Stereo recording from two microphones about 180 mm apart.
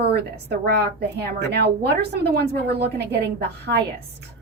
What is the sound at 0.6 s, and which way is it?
A woman's voice, 65° right (ahead or behind).